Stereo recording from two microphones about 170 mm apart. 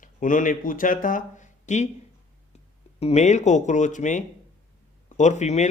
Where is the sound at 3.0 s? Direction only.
40° left (ahead or behind).